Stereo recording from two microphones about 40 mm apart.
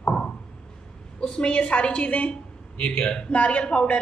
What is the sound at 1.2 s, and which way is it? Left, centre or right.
A woman's voice, left.